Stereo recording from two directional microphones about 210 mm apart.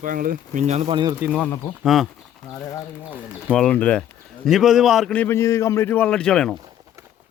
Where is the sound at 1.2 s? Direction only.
5° right (ahead or behind).